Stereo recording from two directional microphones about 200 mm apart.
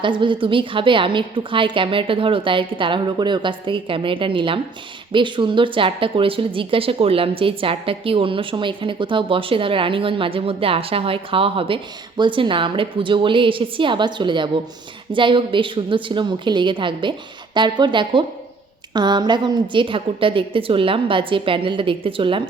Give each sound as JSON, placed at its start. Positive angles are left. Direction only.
{"t": 0.0, "sound": "a woman's voice", "side_deg": -25}